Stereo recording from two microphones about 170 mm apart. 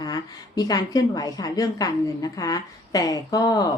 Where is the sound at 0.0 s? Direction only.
20° left (ahead or behind).